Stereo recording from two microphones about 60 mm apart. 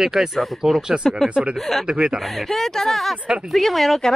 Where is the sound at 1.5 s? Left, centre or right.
Centre.